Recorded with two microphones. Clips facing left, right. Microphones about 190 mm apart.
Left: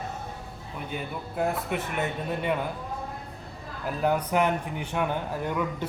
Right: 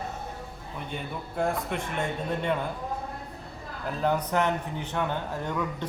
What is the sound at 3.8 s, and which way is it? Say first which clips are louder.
A man's voice: left 1 dB; 10° left (ahead or behind).